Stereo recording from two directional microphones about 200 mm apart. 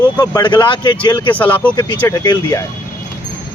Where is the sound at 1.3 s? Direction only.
10° left (ahead or behind).